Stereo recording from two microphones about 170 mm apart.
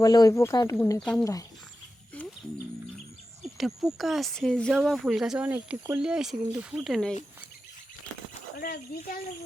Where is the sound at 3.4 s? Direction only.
Centre (ahead or behind).